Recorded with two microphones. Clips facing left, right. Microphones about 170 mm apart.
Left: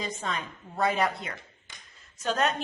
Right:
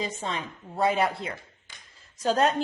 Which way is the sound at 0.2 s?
25° right (ahead or behind).